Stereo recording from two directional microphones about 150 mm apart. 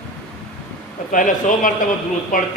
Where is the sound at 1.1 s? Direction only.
65° left (ahead or behind).